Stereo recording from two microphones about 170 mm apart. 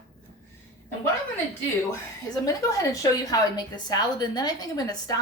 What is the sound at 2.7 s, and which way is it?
Speech, 20° left (ahead or behind).